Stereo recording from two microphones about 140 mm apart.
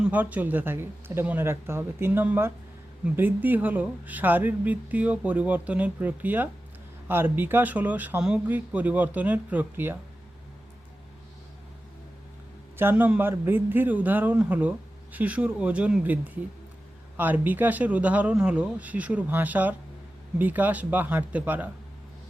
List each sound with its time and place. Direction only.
0.0 s a man's voice: 10° right (ahead or behind)
12.7 s a man's voice: 15° right (ahead or behind)